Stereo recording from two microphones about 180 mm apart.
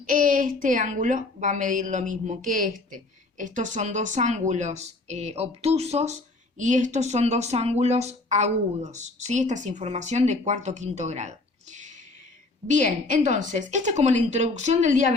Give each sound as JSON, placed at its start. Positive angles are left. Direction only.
{"t": 0.0, "sound": "a woman's voice", "side_deg": -50}